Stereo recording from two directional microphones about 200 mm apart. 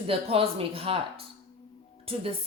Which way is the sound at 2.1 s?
30° right (ahead or behind).